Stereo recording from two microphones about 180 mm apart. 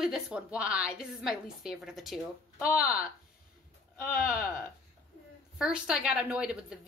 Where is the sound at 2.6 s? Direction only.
55° left (ahead or behind).